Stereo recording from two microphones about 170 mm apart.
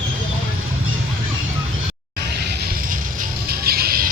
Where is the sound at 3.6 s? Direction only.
60° right (ahead or behind).